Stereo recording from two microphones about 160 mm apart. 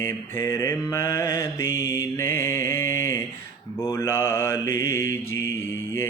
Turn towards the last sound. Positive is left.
turn(degrees=15)  # may be behind; listen again after turning